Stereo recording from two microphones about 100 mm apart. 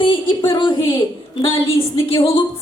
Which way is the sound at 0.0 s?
60° left (ahead or behind).